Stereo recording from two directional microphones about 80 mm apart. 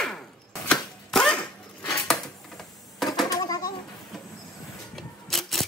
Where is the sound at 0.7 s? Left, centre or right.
Centre.